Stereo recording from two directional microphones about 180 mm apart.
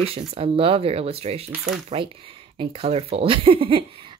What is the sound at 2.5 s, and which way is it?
Speech, 30° right (ahead or behind).